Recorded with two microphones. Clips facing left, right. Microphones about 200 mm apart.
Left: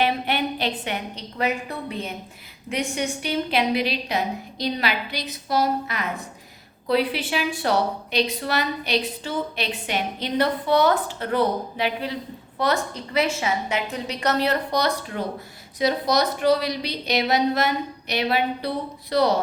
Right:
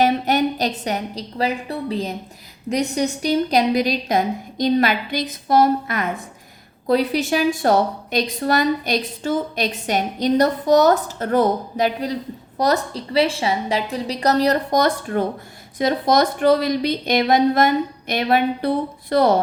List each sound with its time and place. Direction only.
0.0 s a woman's voice: 40° right (ahead or behind)